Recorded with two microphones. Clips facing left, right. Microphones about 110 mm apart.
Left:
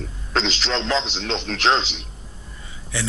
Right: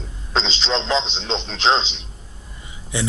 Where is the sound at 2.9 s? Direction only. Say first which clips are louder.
Right 3 dB; 20° right (ahead or behind).